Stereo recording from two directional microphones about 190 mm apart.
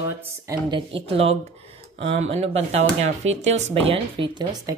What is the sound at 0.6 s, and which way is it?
Speech, 25° right (ahead or behind).